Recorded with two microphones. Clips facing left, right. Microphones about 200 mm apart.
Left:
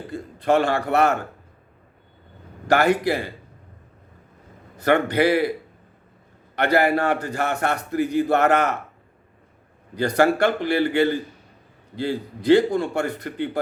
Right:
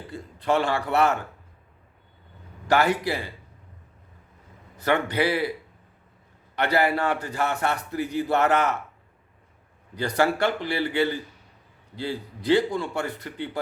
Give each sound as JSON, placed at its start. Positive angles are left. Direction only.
{"t": 0.1, "sound": "a man's voice", "side_deg": 45}
{"t": 2.6, "sound": "a man's voice", "side_deg": 50}
{"t": 4.8, "sound": "a man's voice", "side_deg": 50}
{"t": 6.6, "sound": "a man's voice", "side_deg": 50}
{"t": 10.2, "sound": "a man's voice", "side_deg": 50}